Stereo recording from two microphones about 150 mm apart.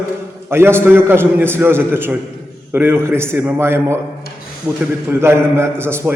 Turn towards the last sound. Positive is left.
turn(degrees=-15)  # may be behind; listen again after turning